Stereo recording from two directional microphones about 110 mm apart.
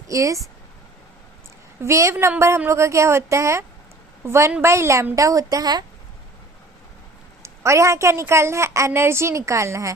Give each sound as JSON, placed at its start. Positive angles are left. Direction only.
{"t": 0.1, "sound": "a woman's voice", "side_deg": -30}
{"t": 1.8, "sound": "a woman's voice", "side_deg": -25}
{"t": 7.4, "sound": "a woman's voice", "side_deg": -25}